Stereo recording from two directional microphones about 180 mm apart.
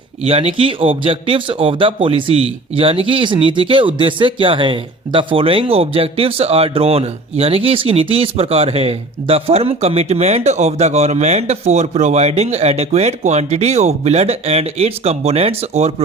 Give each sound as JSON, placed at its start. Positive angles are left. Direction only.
{"t": 0.2, "sound": "speech", "side_deg": -35}